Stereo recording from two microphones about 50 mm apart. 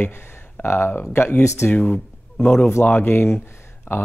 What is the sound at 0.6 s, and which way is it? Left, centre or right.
Speech, left.